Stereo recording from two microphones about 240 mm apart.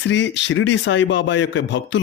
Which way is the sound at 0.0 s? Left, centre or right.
Left.